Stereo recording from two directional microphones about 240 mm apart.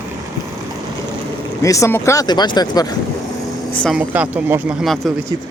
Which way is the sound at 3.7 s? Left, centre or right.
Centre.